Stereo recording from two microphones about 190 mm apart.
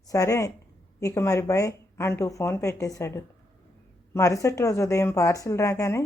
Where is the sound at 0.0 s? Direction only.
15° left (ahead or behind).